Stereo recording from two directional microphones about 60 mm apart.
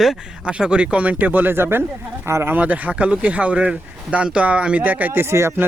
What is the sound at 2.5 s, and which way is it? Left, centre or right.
Speech, right.